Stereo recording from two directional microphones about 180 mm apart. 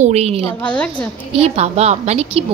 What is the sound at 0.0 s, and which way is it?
Speech, 35° right (ahead or behind).